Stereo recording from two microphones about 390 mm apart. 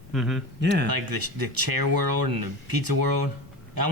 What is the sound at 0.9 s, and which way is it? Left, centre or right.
Speech, right.